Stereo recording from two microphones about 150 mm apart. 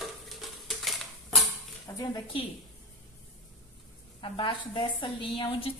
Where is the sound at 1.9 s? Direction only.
25° left (ahead or behind).